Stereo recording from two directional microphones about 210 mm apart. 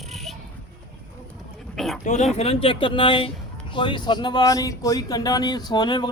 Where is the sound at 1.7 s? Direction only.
Centre (ahead or behind).